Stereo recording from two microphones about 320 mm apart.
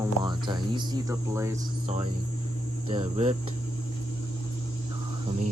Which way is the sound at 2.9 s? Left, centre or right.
Centre.